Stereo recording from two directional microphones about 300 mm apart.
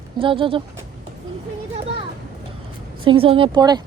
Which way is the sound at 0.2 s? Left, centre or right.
Centre.